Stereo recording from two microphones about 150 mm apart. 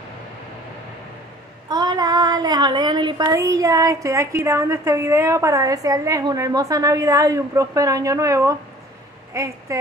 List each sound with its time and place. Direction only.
1.7 s child singing: 25° right (ahead or behind)
4.5 s a woman's voice: 20° right (ahead or behind)